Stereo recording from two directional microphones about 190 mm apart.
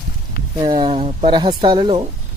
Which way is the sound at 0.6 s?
25° right (ahead or behind).